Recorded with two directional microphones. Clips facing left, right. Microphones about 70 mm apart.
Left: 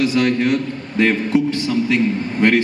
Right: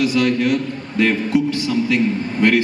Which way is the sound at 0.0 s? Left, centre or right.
Left.